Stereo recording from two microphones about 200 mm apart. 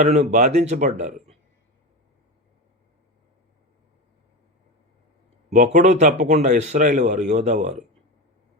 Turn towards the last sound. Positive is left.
turn(degrees=-35)  # may be behind; listen again after turning